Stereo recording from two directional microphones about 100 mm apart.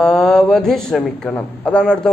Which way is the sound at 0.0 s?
5° left (ahead or behind).